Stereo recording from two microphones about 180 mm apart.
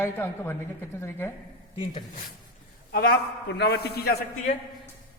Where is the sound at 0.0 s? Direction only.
10° left (ahead or behind).